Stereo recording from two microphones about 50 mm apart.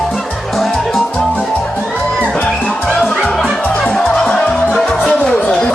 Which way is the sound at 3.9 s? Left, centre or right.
Centre.